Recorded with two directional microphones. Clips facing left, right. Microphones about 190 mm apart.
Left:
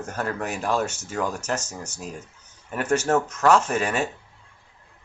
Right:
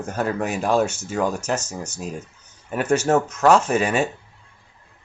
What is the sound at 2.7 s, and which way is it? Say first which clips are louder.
Speech: right 3 dB; 20° right (ahead or behind).